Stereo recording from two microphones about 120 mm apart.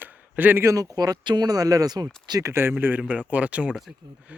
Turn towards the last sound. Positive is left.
turn(degrees=-10)  # may be behind; listen again after turning